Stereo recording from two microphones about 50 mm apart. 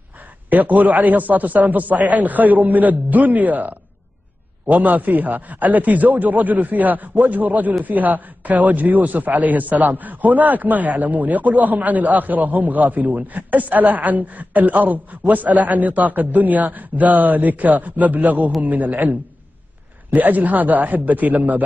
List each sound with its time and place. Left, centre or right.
0.5 s a man's voice: right